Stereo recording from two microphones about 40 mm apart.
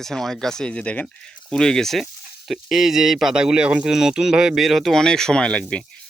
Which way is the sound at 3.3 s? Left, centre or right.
Right.